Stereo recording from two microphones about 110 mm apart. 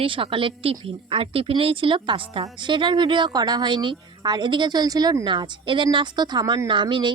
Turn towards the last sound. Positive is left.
turn(degrees=-45)  # may be behind; listen again after turning